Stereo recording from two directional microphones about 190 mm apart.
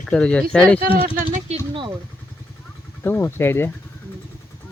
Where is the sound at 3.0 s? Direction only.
10° left (ahead or behind).